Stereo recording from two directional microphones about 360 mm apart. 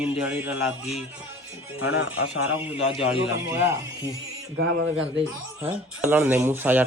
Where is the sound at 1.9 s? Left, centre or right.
Left.